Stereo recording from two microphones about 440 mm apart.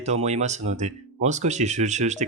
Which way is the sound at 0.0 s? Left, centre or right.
Centre.